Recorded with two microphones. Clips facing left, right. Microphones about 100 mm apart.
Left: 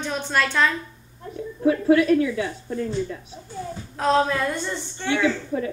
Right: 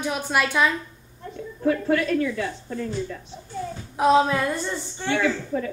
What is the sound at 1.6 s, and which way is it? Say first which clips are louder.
A man's voice: left 4 dB; 10° left (ahead or behind).